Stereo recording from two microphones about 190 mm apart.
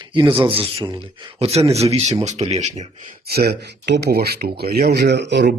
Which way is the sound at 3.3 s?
55° right (ahead or behind).